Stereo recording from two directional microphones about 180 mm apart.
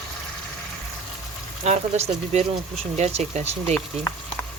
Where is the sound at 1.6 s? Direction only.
35° right (ahead or behind).